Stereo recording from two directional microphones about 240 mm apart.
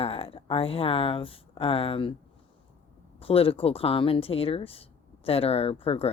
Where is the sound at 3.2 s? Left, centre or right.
Left.